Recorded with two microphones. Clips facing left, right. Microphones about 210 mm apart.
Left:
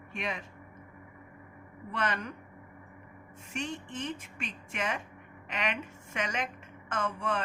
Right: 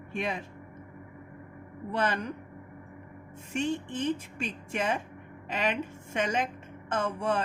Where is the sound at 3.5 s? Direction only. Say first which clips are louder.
Right 7 dB; 30° right (ahead or behind).